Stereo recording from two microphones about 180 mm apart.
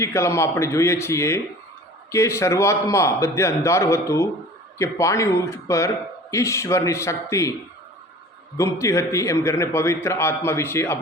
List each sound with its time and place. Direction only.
0.0 s a man's voice: 15° left (ahead or behind)
8.5 s a man's voice: 15° left (ahead or behind)